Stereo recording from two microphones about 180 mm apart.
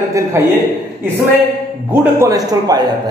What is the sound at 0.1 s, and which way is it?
Speech, 15° right (ahead or behind).